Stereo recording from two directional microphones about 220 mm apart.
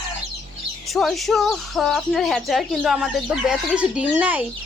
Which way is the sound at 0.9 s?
Centre (ahead or behind).